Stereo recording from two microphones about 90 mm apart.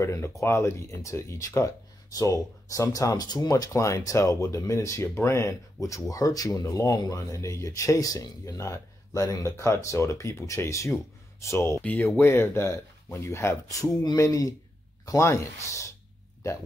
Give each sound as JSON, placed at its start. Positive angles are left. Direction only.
{"t": 0.0, "sound": "speech", "side_deg": 30}
{"t": 11.8, "sound": "speech", "side_deg": 20}